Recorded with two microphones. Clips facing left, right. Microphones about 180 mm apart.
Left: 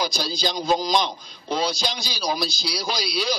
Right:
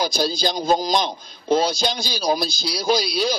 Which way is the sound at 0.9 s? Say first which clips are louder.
Right 1 dB; 45° right (ahead or behind).